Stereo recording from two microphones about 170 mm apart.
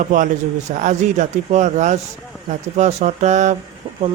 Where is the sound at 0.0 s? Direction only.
50° right (ahead or behind).